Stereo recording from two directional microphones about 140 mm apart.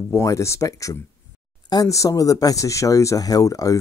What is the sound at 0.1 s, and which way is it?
Speech, 20° left (ahead or behind).